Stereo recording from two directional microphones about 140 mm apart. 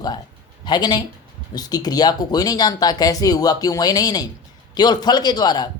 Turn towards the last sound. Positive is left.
turn(degrees=30)  # may be behind; listen again after turning